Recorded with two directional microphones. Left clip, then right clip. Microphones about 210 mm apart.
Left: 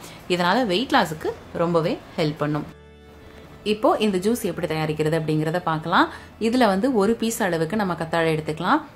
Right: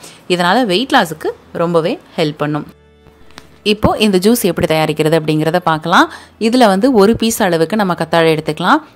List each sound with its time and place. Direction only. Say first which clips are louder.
0.3 s a woman's voice: right 8 dB; 35° right (ahead or behind)
3.6 s a woman's voice: right 7 dB; 45° right (ahead or behind)